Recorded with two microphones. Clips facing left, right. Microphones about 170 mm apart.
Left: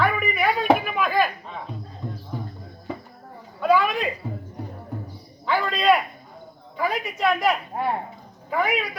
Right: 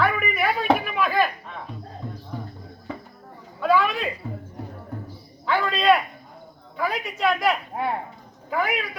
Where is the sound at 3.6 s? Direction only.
Centre (ahead or behind).